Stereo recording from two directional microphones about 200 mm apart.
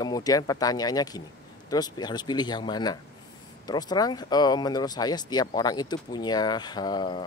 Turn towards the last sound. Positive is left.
turn(degrees=20)  # may be behind; listen again after turning